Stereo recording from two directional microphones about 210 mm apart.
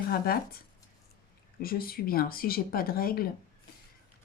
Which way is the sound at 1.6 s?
45° left (ahead or behind).